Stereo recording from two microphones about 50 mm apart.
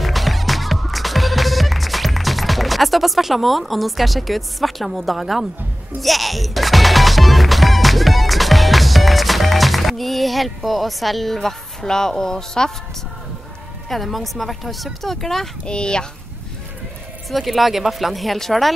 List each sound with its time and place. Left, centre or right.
0.0 s music: centre
13.8 s speech: centre
15.6 s speech: centre
17.3 s speech: centre